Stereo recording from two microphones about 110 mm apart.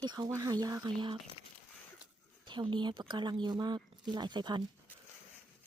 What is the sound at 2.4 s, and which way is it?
Speech, 45° right (ahead or behind).